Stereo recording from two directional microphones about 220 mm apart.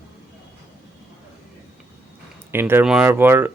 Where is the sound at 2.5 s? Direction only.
10° right (ahead or behind).